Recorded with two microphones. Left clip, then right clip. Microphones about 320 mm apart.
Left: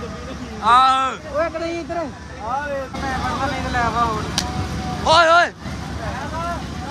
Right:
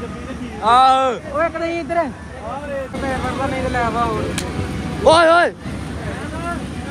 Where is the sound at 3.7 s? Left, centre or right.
Centre.